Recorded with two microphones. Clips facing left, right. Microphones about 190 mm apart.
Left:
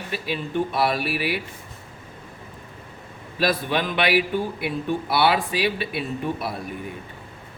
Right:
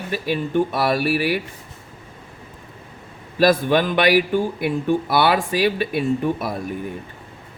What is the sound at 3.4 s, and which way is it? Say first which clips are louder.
Speech: right 7 dB; 45° right (ahead or behind).